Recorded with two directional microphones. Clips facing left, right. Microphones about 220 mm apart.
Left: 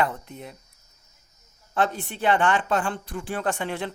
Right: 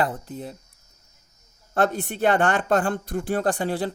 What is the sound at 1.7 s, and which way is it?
Speech, 45° right (ahead or behind).